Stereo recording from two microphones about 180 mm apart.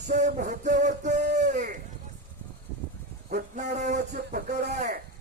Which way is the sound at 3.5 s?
40° right (ahead or behind).